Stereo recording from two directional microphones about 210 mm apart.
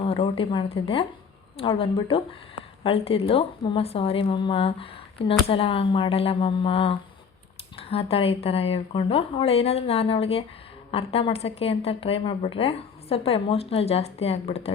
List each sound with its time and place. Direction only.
0.0 s a woman's voice: 25° left (ahead or behind)